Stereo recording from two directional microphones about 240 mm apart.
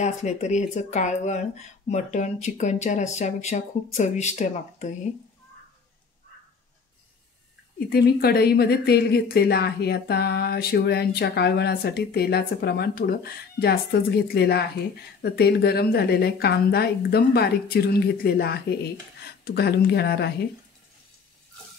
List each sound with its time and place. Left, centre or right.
0.0 s speech: left
7.9 s speech: left